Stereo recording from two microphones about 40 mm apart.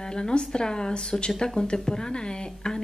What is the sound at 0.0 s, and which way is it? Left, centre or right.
Speech, centre.